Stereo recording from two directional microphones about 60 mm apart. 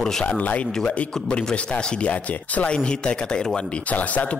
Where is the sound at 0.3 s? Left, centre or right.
Left.